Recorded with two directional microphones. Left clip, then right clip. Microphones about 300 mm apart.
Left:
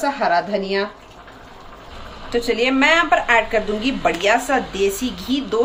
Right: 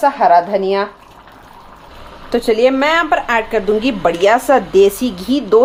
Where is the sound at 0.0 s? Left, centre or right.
Centre.